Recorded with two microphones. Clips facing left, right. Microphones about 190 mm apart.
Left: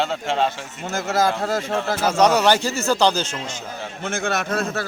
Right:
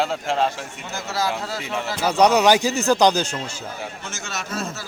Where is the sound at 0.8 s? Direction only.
50° left (ahead or behind).